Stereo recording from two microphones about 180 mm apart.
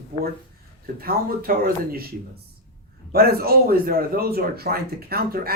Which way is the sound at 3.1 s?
60° right (ahead or behind).